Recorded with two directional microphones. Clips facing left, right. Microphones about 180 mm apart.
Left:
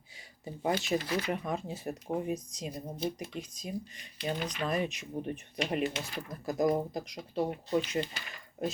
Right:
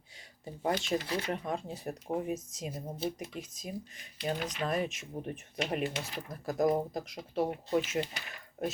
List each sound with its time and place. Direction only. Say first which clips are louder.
0.4 s speech: left 1 dB; 5° left (ahead or behind)
1.0 s speech: left 2 dB; 30° right (ahead or behind)
1.3 s speech: left 1 dB; 5° left (ahead or behind)